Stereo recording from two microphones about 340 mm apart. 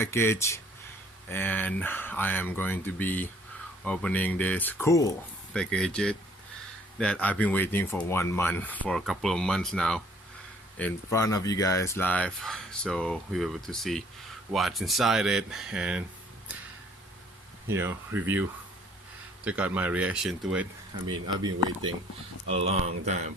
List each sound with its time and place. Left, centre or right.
0.0 s speech: centre
17.7 s speech: centre
19.5 s speech: centre
21.2 s speech: centre